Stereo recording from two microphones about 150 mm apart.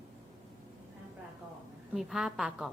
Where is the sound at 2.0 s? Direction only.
Centre (ahead or behind).